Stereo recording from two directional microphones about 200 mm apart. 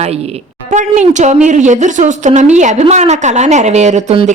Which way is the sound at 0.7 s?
35° right (ahead or behind).